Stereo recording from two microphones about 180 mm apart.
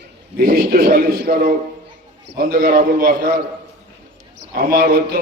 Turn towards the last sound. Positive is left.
turn(degrees=-55)  # may be behind; listen again after turning